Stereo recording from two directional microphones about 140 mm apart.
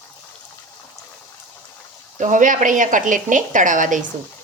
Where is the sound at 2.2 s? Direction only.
65° right (ahead or behind).